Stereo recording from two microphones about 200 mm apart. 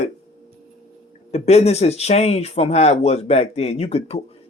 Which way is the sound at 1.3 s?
30° left (ahead or behind).